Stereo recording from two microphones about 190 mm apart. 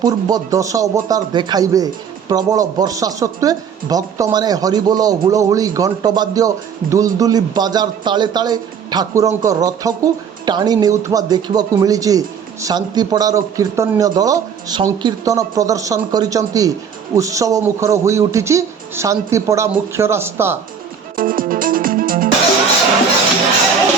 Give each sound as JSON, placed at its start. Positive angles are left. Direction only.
{"t": 0.0, "sound": "a man's voice", "side_deg": -20}
{"t": 21.2, "sound": "music", "side_deg": -50}